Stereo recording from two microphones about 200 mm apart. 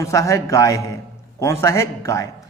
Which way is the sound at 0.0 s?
15° left (ahead or behind).